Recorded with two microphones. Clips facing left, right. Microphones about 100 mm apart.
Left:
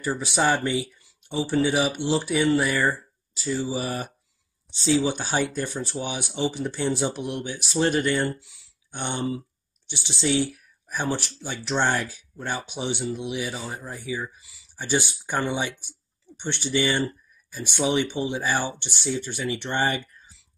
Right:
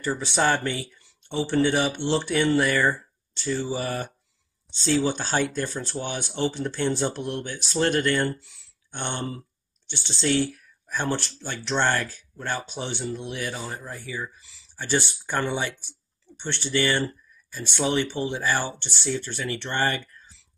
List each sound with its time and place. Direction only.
0.0 s speech: 10° left (ahead or behind)